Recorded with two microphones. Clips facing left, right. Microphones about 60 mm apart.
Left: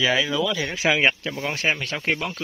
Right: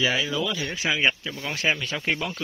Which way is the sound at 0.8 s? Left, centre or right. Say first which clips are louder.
Left 6 dB; left.